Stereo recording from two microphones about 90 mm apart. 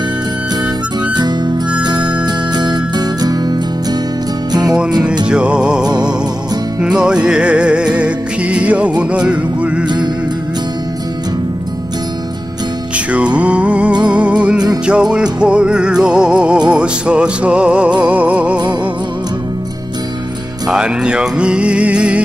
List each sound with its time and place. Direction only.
1.1 s harmonica: 50° right (ahead or behind)
1.8 s music: 55° right (ahead or behind)
5.2 s music: 10° right (ahead or behind)
12.9 s music: 15° right (ahead or behind)
20.6 s music: 10° right (ahead or behind)